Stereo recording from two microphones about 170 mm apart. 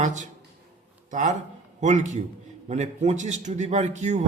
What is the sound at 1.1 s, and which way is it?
A man's voice, 45° right (ahead or behind).